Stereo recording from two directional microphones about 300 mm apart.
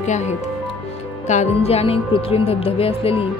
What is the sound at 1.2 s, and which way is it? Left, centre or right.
Speech, left.